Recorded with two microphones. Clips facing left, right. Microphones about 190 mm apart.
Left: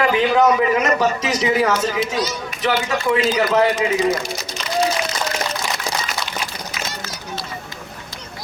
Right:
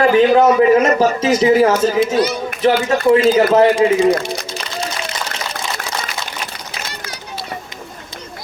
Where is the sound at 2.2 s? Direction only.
55° right (ahead or behind).